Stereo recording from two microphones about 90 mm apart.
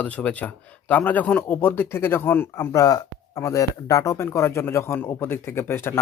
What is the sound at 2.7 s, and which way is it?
Speech, 40° left (ahead or behind).